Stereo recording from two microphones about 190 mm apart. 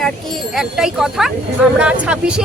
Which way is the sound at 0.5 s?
Centre (ahead or behind).